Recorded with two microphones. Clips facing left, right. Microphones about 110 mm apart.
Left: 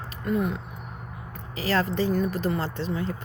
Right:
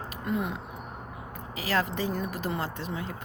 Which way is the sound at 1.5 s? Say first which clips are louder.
Left 4 dB; 10° right (ahead or behind).